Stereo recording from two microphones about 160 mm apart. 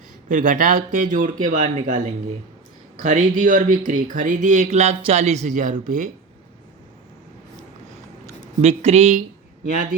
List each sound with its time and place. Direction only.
0.3 s speech: 55° right (ahead or behind)
8.6 s speech: 40° right (ahead or behind)